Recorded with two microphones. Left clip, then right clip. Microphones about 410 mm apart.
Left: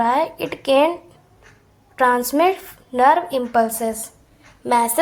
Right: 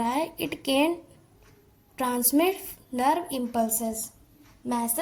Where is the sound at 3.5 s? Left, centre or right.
Right.